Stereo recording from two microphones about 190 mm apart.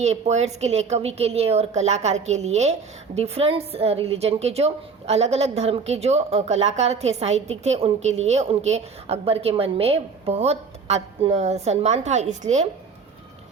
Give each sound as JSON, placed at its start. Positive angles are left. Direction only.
{"t": 0.0, "sound": "a woman's voice", "side_deg": -35}